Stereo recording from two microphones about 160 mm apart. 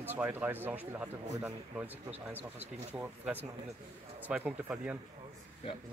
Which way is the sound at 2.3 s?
10° right (ahead or behind).